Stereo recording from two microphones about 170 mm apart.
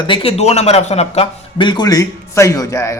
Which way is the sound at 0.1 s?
35° left (ahead or behind).